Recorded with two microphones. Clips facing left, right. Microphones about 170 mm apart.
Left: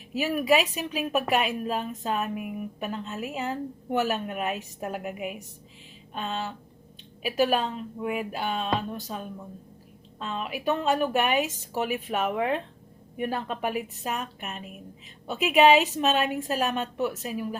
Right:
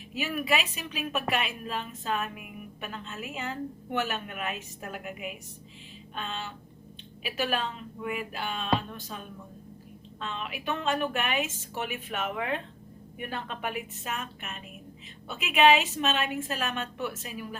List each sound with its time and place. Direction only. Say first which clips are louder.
0.1 s a woman's voice: left 6 dB; 40° left (ahead or behind)
10.2 s a woman's voice: left 6 dB; 40° left (ahead or behind)